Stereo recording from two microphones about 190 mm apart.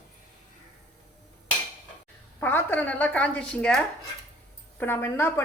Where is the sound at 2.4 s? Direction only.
10° left (ahead or behind).